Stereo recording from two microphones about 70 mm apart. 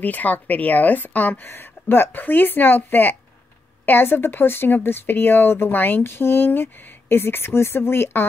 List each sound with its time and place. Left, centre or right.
0.0 s a woman's voice: left